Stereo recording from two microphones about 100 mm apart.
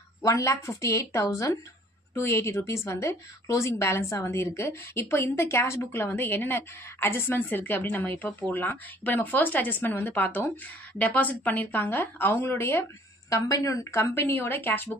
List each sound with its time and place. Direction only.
0.2 s a woman's voice: 35° left (ahead or behind)